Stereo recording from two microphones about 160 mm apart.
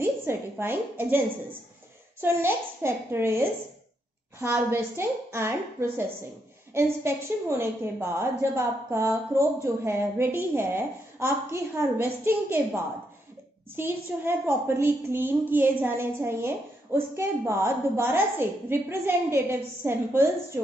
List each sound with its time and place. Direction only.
0.0 s a woman's voice: 15° right (ahead or behind)